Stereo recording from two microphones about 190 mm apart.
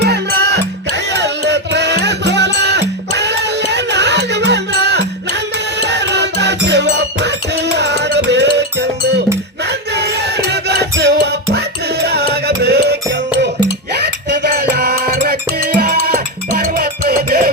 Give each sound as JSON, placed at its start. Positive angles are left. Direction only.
{"t": 0.0, "sound": "music", "side_deg": -60}
{"t": 9.6, "sound": "music", "side_deg": -60}